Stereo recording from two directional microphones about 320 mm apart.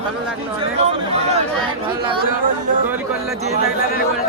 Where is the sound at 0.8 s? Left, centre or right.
Centre.